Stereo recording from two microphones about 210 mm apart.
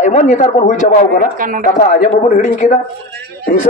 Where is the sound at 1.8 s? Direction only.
40° left (ahead or behind).